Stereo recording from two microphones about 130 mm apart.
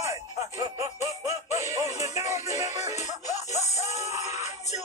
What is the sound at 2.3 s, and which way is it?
Music, 60° left (ahead or behind).